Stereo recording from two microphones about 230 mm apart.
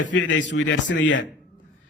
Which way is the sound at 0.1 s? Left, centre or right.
Left.